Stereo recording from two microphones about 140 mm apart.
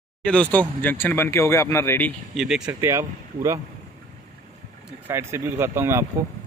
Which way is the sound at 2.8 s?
20° right (ahead or behind).